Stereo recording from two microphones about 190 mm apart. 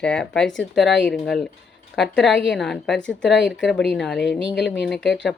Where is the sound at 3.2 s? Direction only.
70° left (ahead or behind).